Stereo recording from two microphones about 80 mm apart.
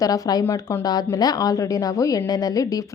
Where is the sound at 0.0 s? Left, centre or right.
Left.